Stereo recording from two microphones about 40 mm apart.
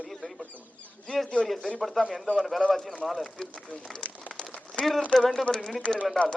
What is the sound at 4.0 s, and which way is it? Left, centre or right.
Crumpling, left.